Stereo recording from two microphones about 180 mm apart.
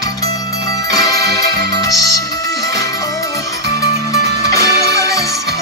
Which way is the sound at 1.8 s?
20° left (ahead or behind).